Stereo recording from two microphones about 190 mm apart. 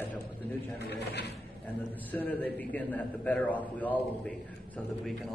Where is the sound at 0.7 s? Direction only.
60° left (ahead or behind).